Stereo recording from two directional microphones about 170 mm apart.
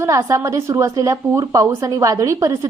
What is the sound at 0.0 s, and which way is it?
A woman's voice, 15° right (ahead or behind).